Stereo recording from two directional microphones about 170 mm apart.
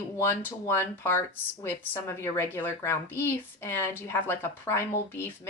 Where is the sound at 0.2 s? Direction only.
15° left (ahead or behind).